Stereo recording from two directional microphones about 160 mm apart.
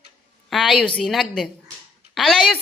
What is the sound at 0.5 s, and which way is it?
A man's voice, centre (ahead or behind).